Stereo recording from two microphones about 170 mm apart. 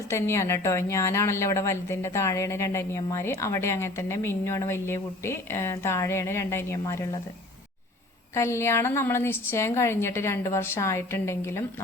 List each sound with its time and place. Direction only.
0.1 s a woman's voice: 15° left (ahead or behind)
8.4 s a woman's voice: 15° left (ahead or behind)